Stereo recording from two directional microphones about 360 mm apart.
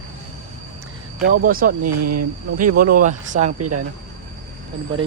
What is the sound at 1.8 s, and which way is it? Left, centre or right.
Speech, right.